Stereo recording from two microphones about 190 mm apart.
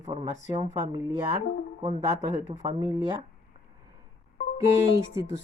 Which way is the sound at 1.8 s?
35° right (ahead or behind).